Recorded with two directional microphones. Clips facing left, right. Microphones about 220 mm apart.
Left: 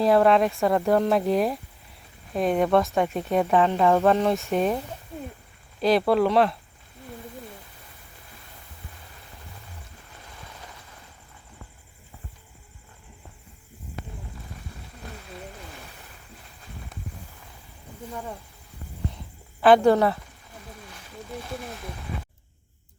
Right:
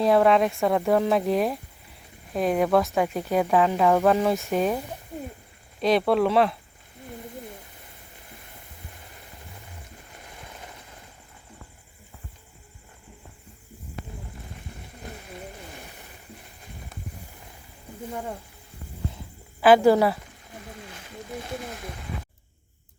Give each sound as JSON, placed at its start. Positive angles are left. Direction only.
{"t": 0.0, "sound": "speech", "side_deg": 0}
{"t": 5.8, "sound": "speech", "side_deg": 0}
{"t": 18.1, "sound": "speech", "side_deg": -25}
{"t": 19.6, "sound": "speech", "side_deg": -5}
{"t": 20.9, "sound": "a sound", "side_deg": -20}